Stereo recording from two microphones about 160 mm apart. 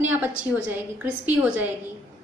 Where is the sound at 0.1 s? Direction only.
10° right (ahead or behind).